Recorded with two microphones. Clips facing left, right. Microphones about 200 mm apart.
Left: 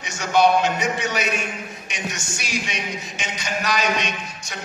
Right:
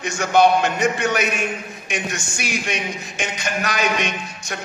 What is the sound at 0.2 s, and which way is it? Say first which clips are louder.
A man's voice: right 2 dB; 55° right (ahead or behind).